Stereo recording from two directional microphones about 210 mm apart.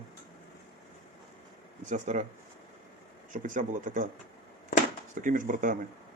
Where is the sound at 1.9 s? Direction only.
35° right (ahead or behind).